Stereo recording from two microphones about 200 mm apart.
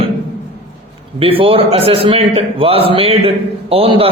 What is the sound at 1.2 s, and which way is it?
A man's voice, 30° right (ahead or behind).